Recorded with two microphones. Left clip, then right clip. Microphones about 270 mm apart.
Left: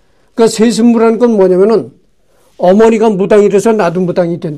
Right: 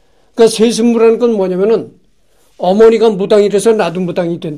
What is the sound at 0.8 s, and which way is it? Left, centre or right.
Speech, left.